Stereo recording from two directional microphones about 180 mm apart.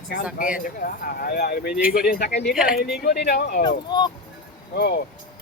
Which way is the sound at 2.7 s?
60° left (ahead or behind).